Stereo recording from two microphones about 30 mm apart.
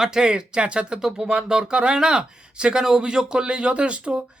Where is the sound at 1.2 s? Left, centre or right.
Right.